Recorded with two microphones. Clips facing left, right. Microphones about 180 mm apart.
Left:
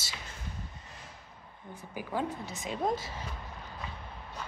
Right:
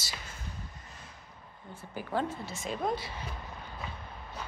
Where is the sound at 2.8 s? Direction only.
40° left (ahead or behind).